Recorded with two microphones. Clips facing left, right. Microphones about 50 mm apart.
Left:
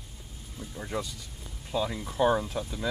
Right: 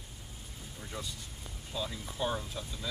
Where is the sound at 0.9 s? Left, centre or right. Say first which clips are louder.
Left 8 dB; left.